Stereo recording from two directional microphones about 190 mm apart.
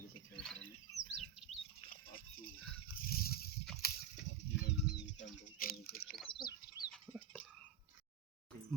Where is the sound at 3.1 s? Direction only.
50° left (ahead or behind).